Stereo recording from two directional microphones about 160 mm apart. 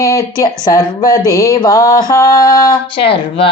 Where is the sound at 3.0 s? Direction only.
35° left (ahead or behind).